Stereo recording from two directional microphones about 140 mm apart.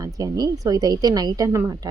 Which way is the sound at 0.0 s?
25° right (ahead or behind).